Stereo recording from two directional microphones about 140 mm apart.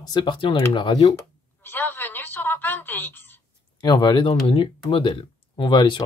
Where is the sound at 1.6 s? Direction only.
15° left (ahead or behind).